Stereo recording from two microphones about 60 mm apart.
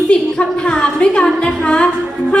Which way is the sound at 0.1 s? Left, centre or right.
Centre.